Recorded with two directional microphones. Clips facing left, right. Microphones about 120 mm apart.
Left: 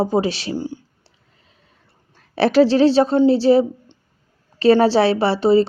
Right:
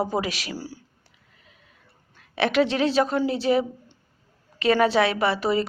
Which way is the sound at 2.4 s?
35° left (ahead or behind).